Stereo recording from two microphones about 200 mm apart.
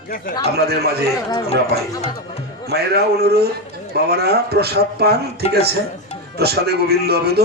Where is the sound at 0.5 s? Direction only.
55° right (ahead or behind).